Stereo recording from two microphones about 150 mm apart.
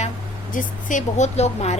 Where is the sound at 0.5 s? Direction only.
60° left (ahead or behind).